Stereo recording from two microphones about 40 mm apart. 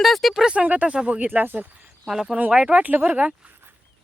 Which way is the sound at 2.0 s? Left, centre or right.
Centre.